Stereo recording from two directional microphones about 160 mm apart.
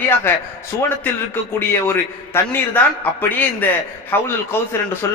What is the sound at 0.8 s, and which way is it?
A man's voice, 15° left (ahead or behind).